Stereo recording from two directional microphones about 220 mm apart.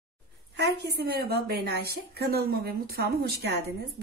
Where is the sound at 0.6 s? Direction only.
50° right (ahead or behind).